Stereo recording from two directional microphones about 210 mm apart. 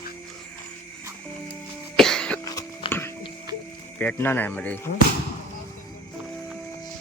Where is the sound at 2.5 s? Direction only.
15° left (ahead or behind).